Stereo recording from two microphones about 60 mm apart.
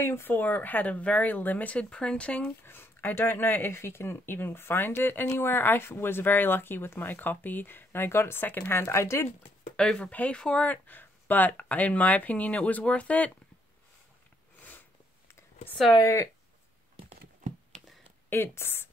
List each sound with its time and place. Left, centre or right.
0.0 s speech: left
2.6 s speech: left
8.7 s speech: left
9.8 s speech: centre
14.6 s a sound: left
16.0 s speech: left
17.7 s a sound: centre
18.3 s speech: left